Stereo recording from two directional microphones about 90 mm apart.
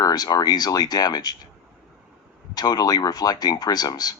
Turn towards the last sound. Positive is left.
turn(degrees=45)  # may be behind; listen again after turning